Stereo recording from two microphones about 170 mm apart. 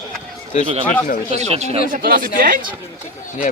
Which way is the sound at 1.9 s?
60° right (ahead or behind).